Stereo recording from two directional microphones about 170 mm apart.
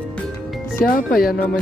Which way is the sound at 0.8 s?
55° left (ahead or behind).